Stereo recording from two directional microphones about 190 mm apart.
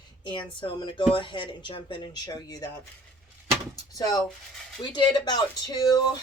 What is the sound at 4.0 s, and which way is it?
Speech, 20° left (ahead or behind).